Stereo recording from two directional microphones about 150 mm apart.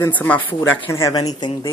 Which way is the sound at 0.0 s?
10° left (ahead or behind).